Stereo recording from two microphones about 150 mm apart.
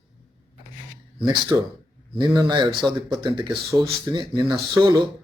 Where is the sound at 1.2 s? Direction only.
30° right (ahead or behind).